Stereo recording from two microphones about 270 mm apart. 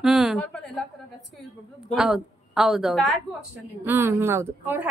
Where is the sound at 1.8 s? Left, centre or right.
Centre.